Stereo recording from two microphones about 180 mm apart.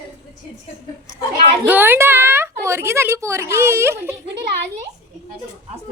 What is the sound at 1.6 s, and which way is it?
A woman's voice, 10° right (ahead or behind).